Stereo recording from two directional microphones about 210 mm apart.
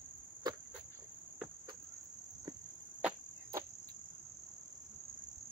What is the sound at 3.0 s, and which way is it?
Cricket, 15° right (ahead or behind).